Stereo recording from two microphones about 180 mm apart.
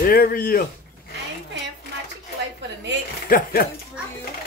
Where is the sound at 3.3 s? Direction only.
55° left (ahead or behind).